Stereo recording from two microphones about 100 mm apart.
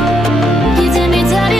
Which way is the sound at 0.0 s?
Centre (ahead or behind).